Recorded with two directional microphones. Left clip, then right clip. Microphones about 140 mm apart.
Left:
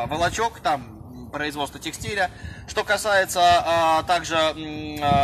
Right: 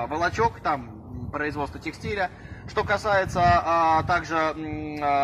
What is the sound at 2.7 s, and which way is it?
Speech, 20° left (ahead or behind).